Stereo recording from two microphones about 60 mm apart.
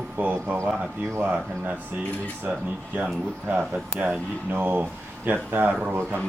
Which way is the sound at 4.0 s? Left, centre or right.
Right.